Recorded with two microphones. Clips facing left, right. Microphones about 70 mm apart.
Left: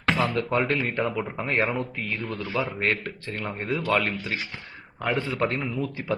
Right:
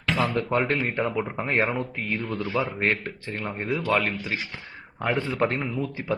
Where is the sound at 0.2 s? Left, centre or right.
Right.